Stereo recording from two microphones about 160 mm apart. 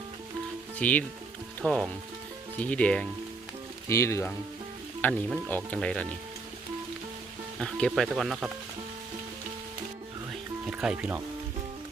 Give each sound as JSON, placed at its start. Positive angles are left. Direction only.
{"t": 0.8, "sound": "speech", "side_deg": 10}
{"t": 3.8, "sound": "speech", "side_deg": 20}
{"t": 7.6, "sound": "speech", "side_deg": 0}
{"t": 10.7, "sound": "speech", "side_deg": -5}